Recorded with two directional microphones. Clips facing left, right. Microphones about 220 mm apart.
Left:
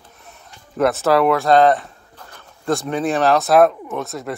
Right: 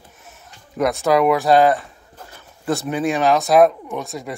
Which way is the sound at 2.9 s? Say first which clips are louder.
Even; centre (ahead or behind).